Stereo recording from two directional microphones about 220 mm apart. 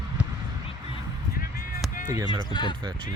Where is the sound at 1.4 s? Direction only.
40° left (ahead or behind).